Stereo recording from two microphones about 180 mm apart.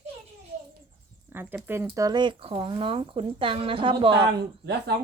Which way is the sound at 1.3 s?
10° right (ahead or behind).